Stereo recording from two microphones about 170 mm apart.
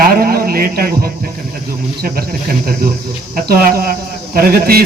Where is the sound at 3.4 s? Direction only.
60° right (ahead or behind).